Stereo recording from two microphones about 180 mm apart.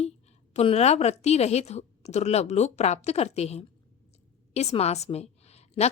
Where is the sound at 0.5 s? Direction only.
35° left (ahead or behind).